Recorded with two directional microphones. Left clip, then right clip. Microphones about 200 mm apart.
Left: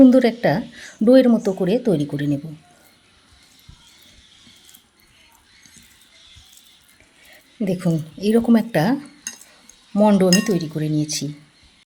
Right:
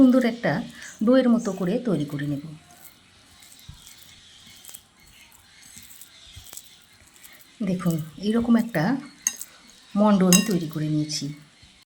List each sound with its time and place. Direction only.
0.1 s speech: 40° left (ahead or behind)
7.6 s speech: 40° left (ahead or behind)
10.0 s speech: 40° left (ahead or behind)